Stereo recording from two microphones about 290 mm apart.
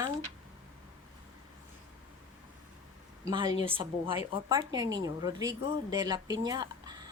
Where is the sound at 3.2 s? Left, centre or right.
Centre.